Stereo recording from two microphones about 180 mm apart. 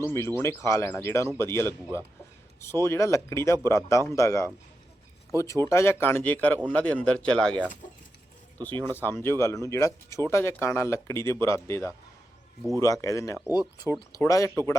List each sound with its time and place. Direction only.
0.0 s speech: 15° left (ahead or behind)
5.6 s speech: 15° left (ahead or behind)
8.9 s speech: 10° left (ahead or behind)